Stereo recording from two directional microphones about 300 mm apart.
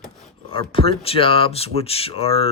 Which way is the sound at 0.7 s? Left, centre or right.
Centre.